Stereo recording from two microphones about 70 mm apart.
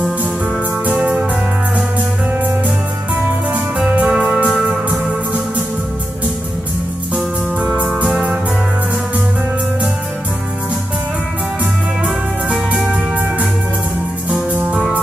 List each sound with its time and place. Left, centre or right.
0.8 s music: centre
3.5 s music: centre
7.6 s music: centre
14.3 s music: right